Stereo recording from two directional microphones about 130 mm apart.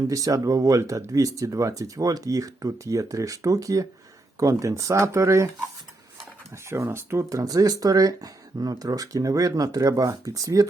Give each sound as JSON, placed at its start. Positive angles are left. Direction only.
{"t": 0.1, "sound": "speech", "side_deg": -25}
{"t": 6.7, "sound": "speech", "side_deg": -20}